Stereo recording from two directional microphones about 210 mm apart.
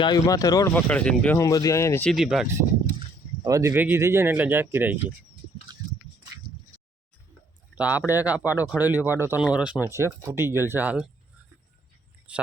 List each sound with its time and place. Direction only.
0.0 s speech: 20° left (ahead or behind)
0.7 s speech: 5° left (ahead or behind)
2.0 s speech: centre (ahead or behind)
3.4 s speech: 15° right (ahead or behind)
7.8 s speech: 10° right (ahead or behind)
12.3 s a sound: 5° right (ahead or behind)